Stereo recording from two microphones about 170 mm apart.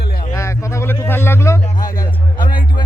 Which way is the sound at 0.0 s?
55° left (ahead or behind).